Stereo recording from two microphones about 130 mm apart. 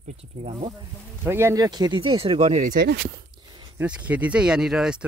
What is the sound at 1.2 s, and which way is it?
Speech, 20° right (ahead or behind).